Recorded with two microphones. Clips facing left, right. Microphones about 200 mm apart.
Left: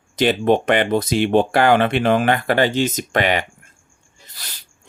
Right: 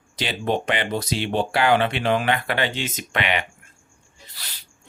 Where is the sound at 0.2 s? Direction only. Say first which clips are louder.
Left 8 dB; 55° left (ahead or behind).